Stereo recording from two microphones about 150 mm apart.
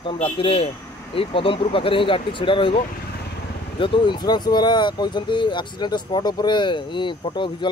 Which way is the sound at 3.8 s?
30° left (ahead or behind).